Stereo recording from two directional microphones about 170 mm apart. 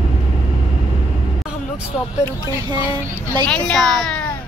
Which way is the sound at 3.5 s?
5° left (ahead or behind).